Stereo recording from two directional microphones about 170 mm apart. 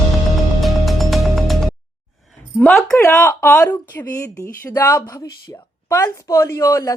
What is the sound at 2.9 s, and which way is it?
A woman's voice, 15° left (ahead or behind).